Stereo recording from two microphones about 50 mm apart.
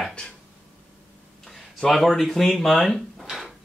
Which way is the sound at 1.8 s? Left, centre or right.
Centre.